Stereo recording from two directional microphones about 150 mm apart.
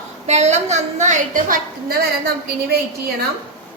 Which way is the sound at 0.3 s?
50° right (ahead or behind).